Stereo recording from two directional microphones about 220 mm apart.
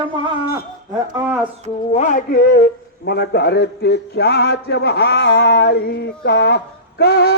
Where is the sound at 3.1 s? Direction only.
50° left (ahead or behind).